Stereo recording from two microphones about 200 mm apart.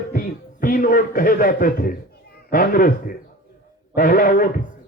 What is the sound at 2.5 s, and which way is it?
A man's voice, 45° left (ahead or behind).